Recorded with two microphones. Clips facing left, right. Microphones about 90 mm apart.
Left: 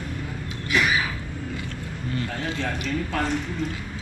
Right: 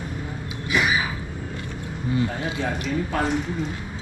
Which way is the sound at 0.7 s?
5° right (ahead or behind).